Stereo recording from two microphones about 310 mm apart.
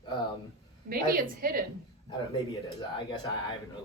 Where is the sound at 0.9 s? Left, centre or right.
Right.